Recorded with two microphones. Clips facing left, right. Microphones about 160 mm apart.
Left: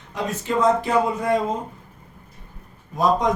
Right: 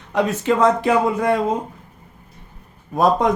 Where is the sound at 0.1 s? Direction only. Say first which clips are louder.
Right 6 dB; 75° right (ahead or behind).